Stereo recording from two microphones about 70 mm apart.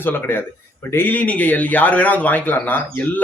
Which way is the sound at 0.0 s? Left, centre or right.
Left.